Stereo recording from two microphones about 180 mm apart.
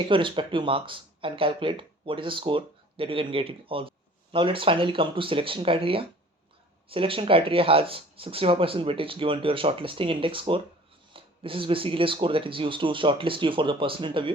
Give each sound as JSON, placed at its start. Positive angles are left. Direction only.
{"t": 0.1, "sound": "speech", "side_deg": -30}